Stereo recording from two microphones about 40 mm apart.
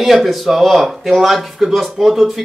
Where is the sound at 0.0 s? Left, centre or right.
Centre.